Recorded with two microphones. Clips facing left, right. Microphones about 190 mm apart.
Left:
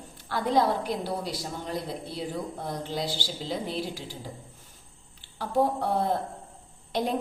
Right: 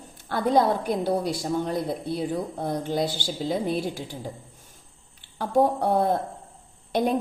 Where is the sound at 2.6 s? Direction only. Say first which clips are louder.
Right 7 dB; 50° right (ahead or behind).